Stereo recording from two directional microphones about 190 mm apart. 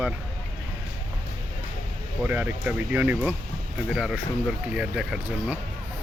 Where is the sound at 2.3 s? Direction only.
10° right (ahead or behind).